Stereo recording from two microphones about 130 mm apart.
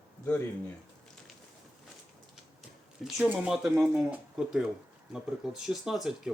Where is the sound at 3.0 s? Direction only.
10° right (ahead or behind).